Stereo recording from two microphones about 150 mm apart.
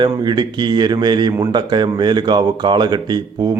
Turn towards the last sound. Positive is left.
turn(degrees=-30)  # may be behind; listen again after turning